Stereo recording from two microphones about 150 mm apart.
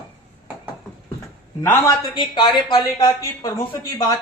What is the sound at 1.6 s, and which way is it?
Speech, 15° left (ahead or behind).